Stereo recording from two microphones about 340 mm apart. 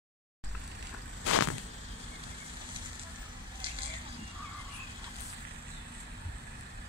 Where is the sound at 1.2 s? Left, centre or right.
Left.